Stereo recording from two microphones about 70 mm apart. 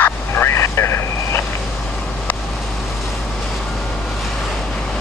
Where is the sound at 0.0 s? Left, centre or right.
Left.